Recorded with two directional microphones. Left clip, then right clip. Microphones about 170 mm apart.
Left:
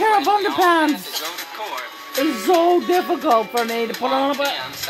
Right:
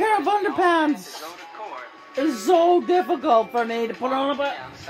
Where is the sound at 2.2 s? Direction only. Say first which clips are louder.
Left 2 dB; 25° left (ahead or behind).